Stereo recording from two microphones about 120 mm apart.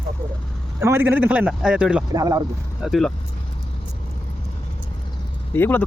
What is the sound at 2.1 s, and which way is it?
Speech, 30° right (ahead or behind).